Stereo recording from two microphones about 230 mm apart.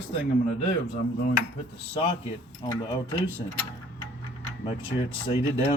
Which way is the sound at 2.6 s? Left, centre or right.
Centre.